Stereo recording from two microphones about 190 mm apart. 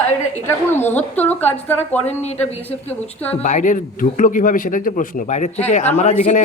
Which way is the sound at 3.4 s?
40° left (ahead or behind).